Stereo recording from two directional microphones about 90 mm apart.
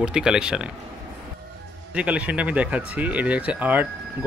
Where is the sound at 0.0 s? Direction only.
10° right (ahead or behind).